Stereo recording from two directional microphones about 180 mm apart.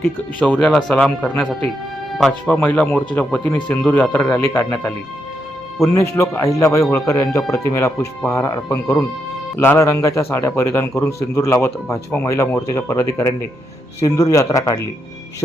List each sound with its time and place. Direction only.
0.3 s a man's voice: 5° left (ahead or behind)